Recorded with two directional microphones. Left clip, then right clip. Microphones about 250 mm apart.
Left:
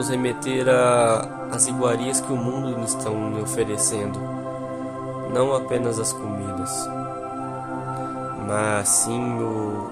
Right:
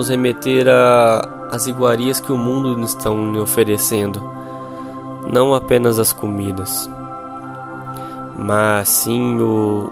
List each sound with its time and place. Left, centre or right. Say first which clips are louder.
0.0 s speech: right 7 dB; right
5.3 s speech: right 8 dB; right
8.4 s speech: right 8 dB; right